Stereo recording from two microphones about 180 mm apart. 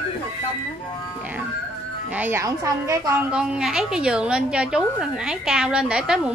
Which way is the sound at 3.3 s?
5° right (ahead or behind).